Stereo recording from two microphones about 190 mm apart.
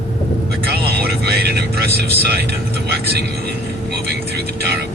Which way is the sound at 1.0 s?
55° right (ahead or behind).